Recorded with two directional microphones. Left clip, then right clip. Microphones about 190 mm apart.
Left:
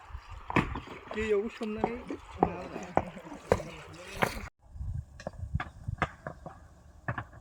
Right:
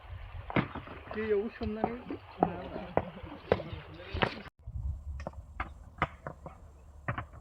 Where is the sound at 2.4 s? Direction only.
15° left (ahead or behind).